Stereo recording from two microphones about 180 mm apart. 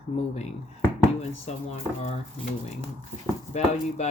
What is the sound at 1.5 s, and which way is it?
Speech, 35° left (ahead or behind).